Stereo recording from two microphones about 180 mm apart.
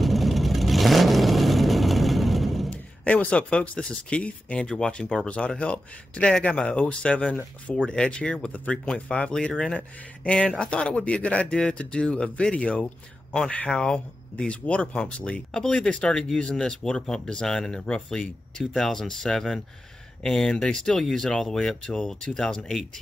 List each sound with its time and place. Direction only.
0.0 s vehicle: centre (ahead or behind)
13.3 s speech: 5° left (ahead or behind)